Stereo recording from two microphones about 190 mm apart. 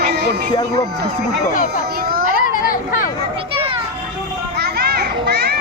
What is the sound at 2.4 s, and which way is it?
Children playing, 45° left (ahead or behind).